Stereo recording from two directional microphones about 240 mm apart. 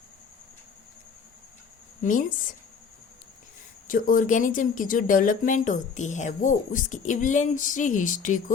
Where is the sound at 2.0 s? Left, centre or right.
Left.